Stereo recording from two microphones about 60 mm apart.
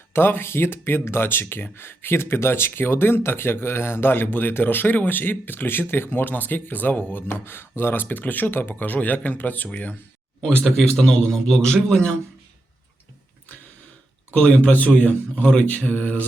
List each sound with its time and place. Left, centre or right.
0.1 s speech: left
10.4 s a man's voice: centre
14.3 s speech: left